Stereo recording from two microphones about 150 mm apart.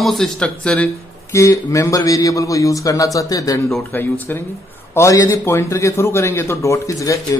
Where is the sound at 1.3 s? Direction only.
20° left (ahead or behind).